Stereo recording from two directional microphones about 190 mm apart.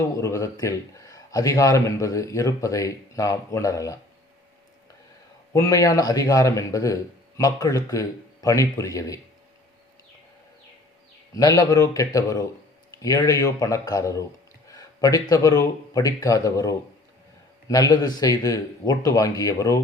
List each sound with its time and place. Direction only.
0.2 s a man's voice: 15° left (ahead or behind)
5.5 s a man's voice: 15° left (ahead or behind)
11.3 s a man's voice: 20° left (ahead or behind)